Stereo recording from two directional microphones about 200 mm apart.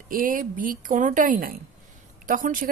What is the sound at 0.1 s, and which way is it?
A woman's voice, 45° right (ahead or behind).